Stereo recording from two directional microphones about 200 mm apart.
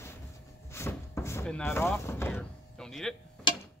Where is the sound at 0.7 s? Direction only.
15° left (ahead or behind).